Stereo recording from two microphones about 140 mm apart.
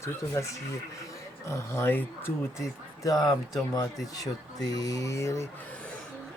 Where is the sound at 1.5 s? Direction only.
20° left (ahead or behind).